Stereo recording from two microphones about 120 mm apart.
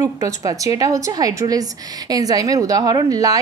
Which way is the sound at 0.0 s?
30° right (ahead or behind).